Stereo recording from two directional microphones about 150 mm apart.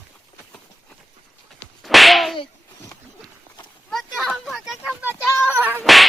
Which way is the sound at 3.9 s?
Centre (ahead or behind).